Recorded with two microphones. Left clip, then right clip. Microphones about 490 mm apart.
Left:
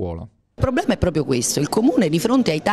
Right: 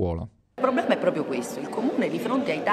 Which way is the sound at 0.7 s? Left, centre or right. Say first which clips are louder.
Left 2 dB; left.